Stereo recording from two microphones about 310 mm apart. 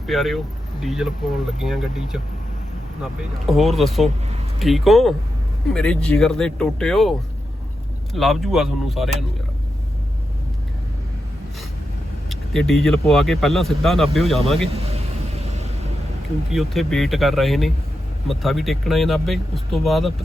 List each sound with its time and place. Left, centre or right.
0.1 s speech: centre
8.1 s speech: centre
12.3 s speech: centre
14.7 s speech: centre
16.5 s speech: centre